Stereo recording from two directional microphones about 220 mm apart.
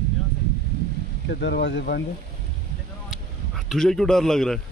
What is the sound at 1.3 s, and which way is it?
Speech, 50° left (ahead or behind).